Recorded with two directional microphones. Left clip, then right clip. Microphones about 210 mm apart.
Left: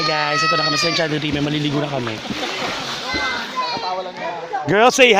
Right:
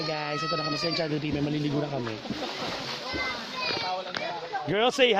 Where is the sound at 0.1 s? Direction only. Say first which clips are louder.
Left 12 dB; 10° left (ahead or behind).